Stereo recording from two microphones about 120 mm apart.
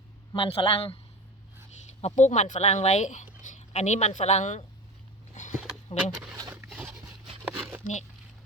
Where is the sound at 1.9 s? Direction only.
65° left (ahead or behind).